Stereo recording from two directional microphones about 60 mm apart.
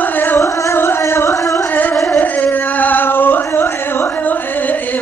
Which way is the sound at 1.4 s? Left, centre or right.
Left.